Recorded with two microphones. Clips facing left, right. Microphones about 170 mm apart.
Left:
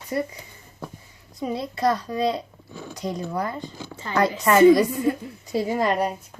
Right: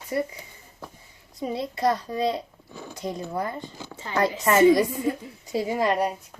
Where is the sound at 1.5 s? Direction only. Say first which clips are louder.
Left 1 dB; 25° right (ahead or behind).